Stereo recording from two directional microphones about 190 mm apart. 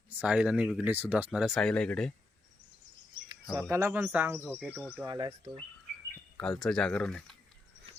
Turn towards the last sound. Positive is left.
turn(degrees=5)  # may be behind; listen again after turning